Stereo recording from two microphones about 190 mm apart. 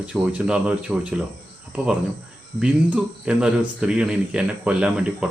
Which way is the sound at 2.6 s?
5° right (ahead or behind).